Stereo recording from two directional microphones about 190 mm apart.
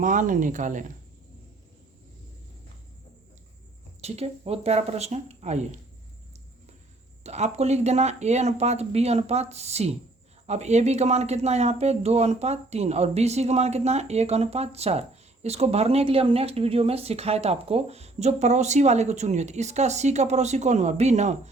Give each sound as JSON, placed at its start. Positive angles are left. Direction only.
{"t": 0.0, "sound": "speech", "side_deg": -45}
{"t": 4.0, "sound": "speech", "side_deg": -35}
{"t": 7.3, "sound": "speech", "side_deg": -35}